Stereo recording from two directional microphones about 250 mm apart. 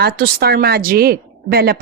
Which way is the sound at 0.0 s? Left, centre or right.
Right.